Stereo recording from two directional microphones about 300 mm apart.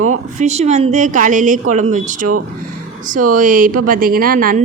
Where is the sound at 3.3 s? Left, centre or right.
Right.